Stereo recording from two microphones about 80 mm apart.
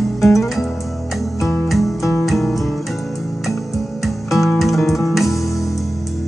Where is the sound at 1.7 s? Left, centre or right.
Centre.